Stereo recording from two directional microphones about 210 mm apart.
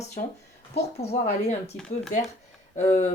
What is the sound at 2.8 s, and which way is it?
Speech, 30° left (ahead or behind).